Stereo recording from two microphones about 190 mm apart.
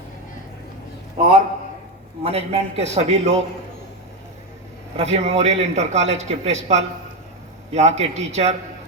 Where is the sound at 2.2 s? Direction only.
35° right (ahead or behind).